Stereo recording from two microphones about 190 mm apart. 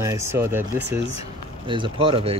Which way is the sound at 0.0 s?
15° right (ahead or behind).